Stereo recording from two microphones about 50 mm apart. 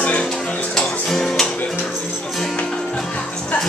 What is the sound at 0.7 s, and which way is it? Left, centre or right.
Music, centre.